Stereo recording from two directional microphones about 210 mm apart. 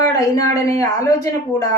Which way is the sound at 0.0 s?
15° left (ahead or behind).